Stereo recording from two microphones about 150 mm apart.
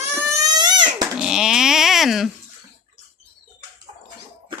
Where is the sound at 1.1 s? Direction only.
5° right (ahead or behind).